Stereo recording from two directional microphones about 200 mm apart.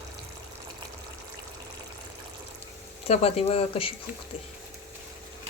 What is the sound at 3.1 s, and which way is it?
Speech, 30° left (ahead or behind).